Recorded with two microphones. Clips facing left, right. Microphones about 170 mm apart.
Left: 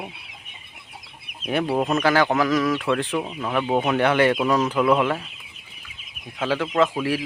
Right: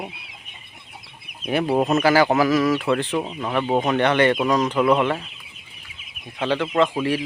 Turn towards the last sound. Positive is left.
turn(degrees=0)  # may be behind; listen again after turning